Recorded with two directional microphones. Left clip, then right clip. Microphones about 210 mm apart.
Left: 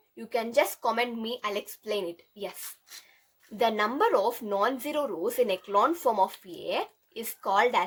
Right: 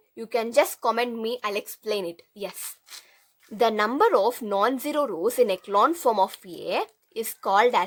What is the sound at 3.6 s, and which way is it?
Speech, 25° right (ahead or behind).